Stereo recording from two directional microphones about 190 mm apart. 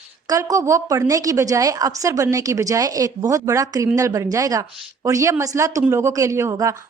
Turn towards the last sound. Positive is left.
turn(degrees=-15)  # may be behind; listen again after turning